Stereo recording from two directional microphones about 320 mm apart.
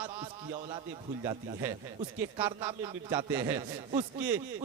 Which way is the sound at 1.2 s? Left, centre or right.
Centre.